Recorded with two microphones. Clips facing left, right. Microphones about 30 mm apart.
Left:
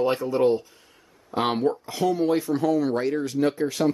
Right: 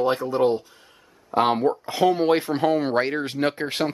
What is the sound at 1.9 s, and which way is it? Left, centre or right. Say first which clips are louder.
Speech: right 6 dB; right.